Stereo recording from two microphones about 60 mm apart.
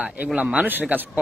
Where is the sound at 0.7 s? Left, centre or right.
Right.